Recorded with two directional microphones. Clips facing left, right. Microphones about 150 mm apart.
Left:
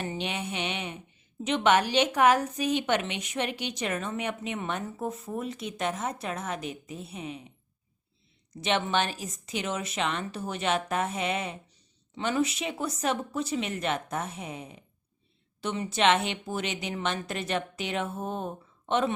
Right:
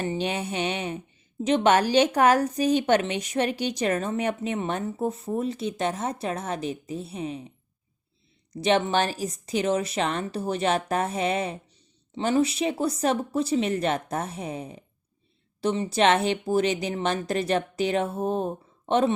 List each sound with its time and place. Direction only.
0.0 s a woman's voice: 35° right (ahead or behind)
8.6 s a woman's voice: 35° right (ahead or behind)